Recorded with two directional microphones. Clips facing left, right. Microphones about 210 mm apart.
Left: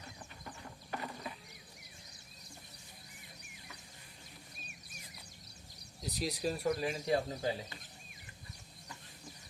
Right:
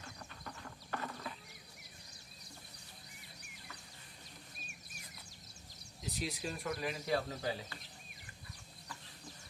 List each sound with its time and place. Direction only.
0.4 s clip-clop: 15° left (ahead or behind)
6.1 s speech: 35° left (ahead or behind)